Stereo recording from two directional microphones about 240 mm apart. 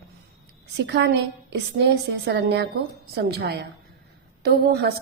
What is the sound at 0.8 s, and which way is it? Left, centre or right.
A woman's voice, right.